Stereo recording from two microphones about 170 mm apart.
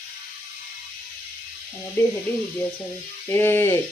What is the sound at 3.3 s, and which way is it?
Speech, 15° left (ahead or behind).